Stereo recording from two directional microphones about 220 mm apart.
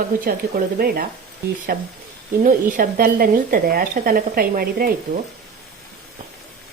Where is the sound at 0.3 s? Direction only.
40° right (ahead or behind).